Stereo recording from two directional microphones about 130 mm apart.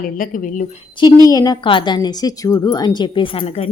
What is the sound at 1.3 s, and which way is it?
A woman's voice, 30° left (ahead or behind).